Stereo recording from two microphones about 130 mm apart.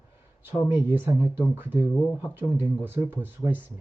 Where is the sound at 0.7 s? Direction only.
15° right (ahead or behind).